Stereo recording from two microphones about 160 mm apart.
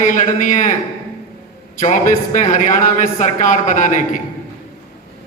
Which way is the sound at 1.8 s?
50° left (ahead or behind).